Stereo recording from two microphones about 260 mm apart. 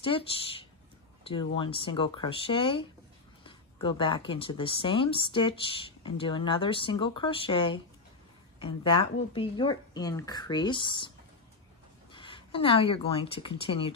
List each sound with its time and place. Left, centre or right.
0.0 s speech: left
12.1 s speech: centre